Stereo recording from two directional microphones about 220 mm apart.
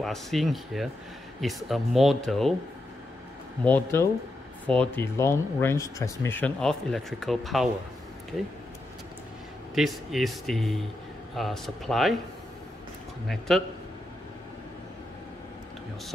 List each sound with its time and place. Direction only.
0.0 s speech: centre (ahead or behind)
3.6 s speech: 10° left (ahead or behind)
9.8 s speech: centre (ahead or behind)
13.5 s speech: centre (ahead or behind)